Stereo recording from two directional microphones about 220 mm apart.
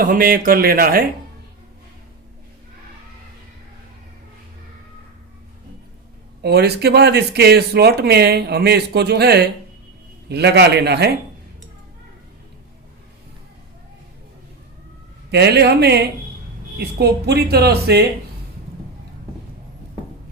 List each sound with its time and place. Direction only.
0.0 s speech: 40° right (ahead or behind)
6.4 s speech: 50° right (ahead or behind)
15.3 s speech: 50° right (ahead or behind)